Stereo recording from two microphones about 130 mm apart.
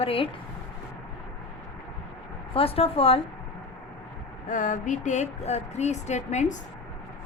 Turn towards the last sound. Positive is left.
turn(degrees=65)  # may be behind; listen again after turning